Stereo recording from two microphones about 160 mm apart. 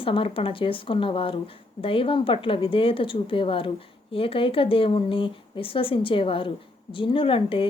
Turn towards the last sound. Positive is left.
turn(degrees=35)  # may be behind; listen again after turning